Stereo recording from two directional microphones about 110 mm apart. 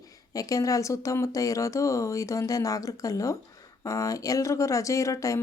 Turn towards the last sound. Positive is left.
turn(degrees=30)  # may be behind; listen again after turning